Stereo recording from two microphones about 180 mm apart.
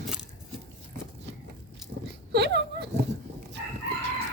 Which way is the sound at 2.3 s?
65° right (ahead or behind).